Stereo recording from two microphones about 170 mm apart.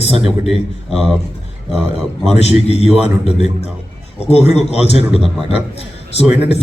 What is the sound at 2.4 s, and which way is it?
A man's voice, 40° left (ahead or behind).